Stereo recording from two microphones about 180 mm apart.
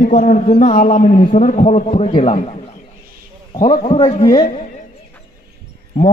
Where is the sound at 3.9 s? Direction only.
40° left (ahead or behind).